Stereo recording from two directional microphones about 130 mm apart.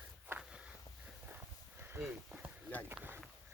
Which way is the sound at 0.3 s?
10° right (ahead or behind).